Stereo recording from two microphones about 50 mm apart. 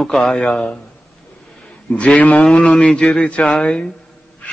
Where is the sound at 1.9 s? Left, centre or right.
Left.